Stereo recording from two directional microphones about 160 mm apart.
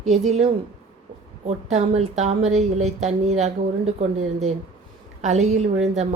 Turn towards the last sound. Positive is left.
turn(degrees=-45)  # may be behind; listen again after turning